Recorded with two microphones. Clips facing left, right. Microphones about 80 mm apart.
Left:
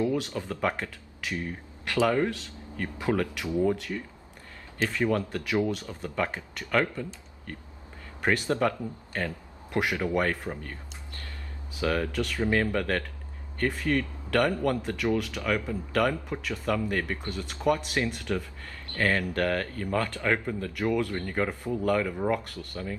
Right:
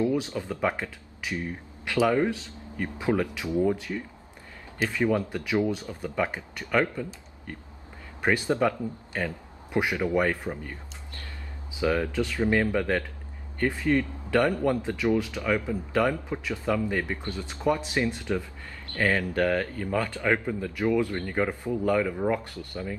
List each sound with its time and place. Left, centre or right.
0.0 s a man's voice: right
11.8 s speech: centre